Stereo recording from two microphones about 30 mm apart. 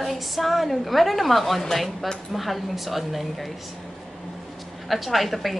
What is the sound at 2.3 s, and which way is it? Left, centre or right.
A woman's voice, centre.